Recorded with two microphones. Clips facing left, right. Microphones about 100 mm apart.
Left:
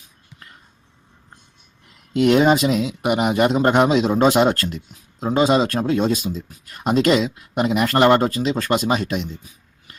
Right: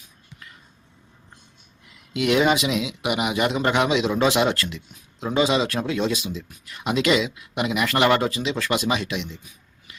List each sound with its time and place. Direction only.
2.1 s speech: 45° left (ahead or behind)